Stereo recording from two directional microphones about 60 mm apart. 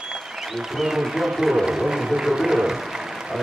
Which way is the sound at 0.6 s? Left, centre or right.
Centre.